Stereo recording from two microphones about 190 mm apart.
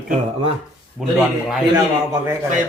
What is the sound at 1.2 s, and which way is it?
Speech, centre (ahead or behind).